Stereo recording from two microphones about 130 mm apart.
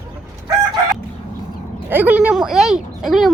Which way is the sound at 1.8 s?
10° right (ahead or behind).